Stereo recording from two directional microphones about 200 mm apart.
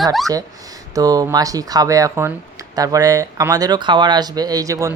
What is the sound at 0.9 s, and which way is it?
Speech, 20° right (ahead or behind).